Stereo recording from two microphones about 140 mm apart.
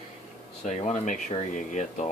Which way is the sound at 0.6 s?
55° left (ahead or behind).